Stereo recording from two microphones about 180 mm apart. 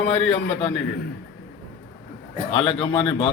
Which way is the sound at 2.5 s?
30° left (ahead or behind).